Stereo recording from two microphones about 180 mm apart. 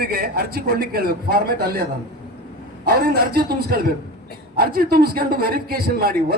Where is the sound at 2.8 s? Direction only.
60° right (ahead or behind).